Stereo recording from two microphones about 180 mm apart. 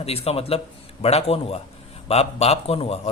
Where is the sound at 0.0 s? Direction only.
35° left (ahead or behind).